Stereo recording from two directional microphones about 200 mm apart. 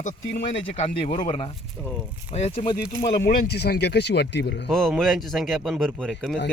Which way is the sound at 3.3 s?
55° left (ahead or behind).